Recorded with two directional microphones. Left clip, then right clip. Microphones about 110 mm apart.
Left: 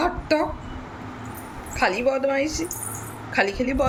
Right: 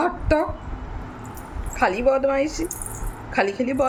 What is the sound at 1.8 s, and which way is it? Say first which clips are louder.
Speech: right 2 dB; 25° right (ahead or behind).